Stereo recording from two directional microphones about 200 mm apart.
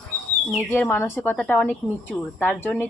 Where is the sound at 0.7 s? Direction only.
10° left (ahead or behind).